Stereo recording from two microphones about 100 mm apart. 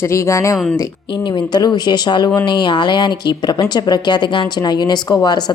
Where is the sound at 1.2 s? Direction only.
45° left (ahead or behind).